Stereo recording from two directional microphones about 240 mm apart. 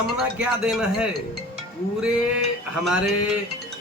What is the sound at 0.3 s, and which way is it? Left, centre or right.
Speech, centre.